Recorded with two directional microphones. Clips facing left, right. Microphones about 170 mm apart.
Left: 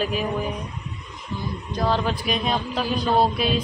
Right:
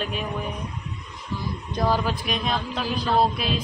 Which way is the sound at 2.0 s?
Centre (ahead or behind).